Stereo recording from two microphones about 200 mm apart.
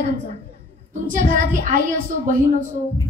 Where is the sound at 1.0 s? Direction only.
40° right (ahead or behind).